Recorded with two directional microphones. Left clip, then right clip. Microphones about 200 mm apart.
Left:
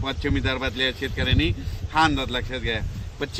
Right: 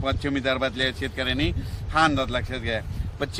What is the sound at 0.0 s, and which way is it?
Speech, 30° right (ahead or behind).